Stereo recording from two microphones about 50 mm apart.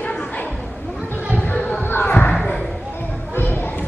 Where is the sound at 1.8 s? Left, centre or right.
Left.